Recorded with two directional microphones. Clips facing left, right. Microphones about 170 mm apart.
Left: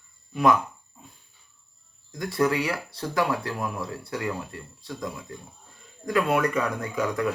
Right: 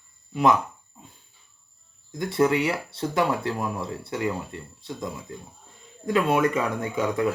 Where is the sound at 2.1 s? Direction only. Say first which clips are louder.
Right 2 dB; 25° right (ahead or behind).